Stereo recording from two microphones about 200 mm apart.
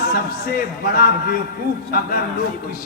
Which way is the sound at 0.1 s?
45° left (ahead or behind).